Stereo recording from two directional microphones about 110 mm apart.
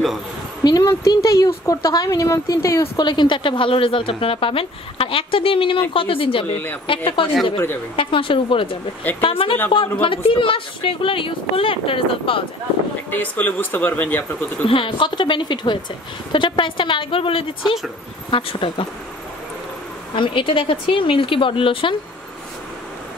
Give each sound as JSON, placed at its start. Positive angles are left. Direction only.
{"t": 0.7, "sound": "speech", "side_deg": 35}
{"t": 3.0, "sound": "a woman's voice", "side_deg": 45}
{"t": 7.5, "sound": "speech", "side_deg": 20}
{"t": 7.9, "sound": "a woman's voice", "side_deg": 55}
{"t": 13.1, "sound": "speech", "side_deg": 15}
{"t": 14.7, "sound": "a woman's voice", "side_deg": 50}
{"t": 20.2, "sound": "speech", "side_deg": 50}